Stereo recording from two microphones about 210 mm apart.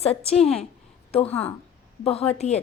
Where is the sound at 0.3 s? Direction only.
5° left (ahead or behind).